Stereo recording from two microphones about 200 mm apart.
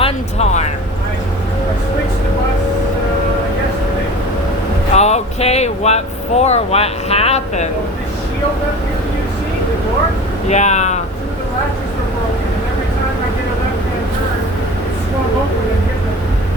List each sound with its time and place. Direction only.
0.0 s a sound: 35° left (ahead or behind)
4.9 s speech: 35° left (ahead or behind)
10.5 s speech: 35° left (ahead or behind)